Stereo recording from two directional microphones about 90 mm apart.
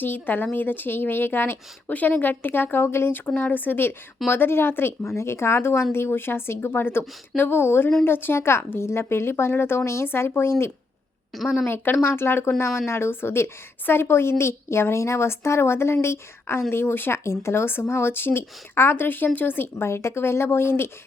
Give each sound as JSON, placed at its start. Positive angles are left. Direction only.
{"t": 0.0, "sound": "a woman's voice", "side_deg": 20}